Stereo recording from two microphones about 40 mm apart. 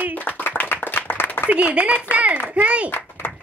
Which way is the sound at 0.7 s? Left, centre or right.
Left.